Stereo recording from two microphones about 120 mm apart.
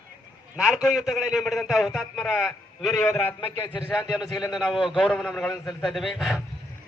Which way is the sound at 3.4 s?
50° left (ahead or behind).